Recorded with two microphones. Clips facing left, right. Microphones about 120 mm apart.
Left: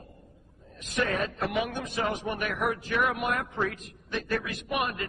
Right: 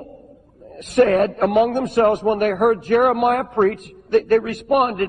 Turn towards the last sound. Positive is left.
turn(degrees=-50)  # may be behind; listen again after turning